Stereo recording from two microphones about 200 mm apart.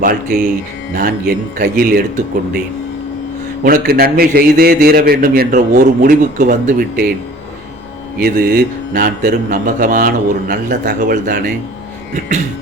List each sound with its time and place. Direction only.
0.0 s a man's voice: 45° right (ahead or behind)
3.6 s a man's voice: 45° right (ahead or behind)
8.2 s a man's voice: 50° right (ahead or behind)